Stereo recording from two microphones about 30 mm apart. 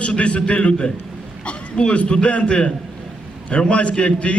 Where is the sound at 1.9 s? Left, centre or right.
Left.